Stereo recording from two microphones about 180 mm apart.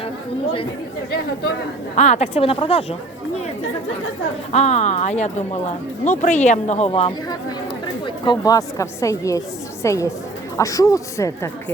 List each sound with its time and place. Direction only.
2.0 s speech: 40° left (ahead or behind)
4.5 s speech: 40° left (ahead or behind); by 11.5 s 15° left (ahead or behind)